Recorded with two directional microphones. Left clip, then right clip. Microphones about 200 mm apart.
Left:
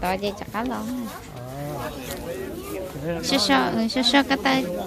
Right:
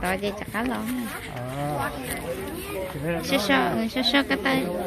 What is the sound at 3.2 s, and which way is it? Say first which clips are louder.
A woman's voice: left 2 dB; 15° left (ahead or behind).